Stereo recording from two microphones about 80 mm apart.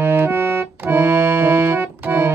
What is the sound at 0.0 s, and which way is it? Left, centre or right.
Music, right.